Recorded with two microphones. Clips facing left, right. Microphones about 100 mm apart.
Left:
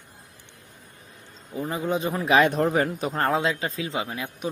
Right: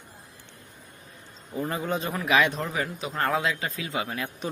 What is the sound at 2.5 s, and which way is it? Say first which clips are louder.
Speech: left 7 dB; 55° left (ahead or behind).